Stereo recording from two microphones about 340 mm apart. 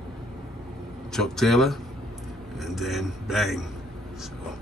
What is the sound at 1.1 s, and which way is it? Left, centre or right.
Speech, centre.